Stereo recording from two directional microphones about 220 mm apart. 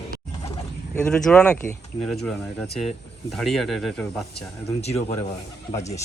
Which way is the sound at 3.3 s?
Centre (ahead or behind).